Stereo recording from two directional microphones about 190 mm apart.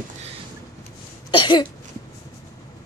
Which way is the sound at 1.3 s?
25° left (ahead or behind).